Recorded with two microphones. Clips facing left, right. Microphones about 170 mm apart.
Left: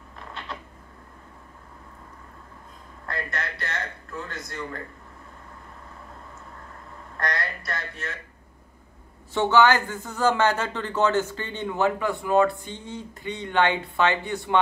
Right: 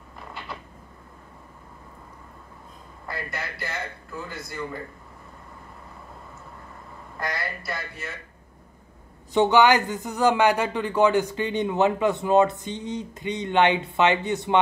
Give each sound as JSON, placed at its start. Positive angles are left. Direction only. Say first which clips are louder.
{"t": 0.3, "sound": "a sound", "louder": "left 1 dB", "side_deg": -5}
{"t": 3.1, "sound": "a man's voice", "louder": "left 1 dB", "side_deg": -5}
{"t": 7.2, "sound": "a man's voice", "louder": "left 1 dB", "side_deg": -5}
{"t": 9.3, "sound": "speech", "louder": "right 2 dB", "side_deg": -15}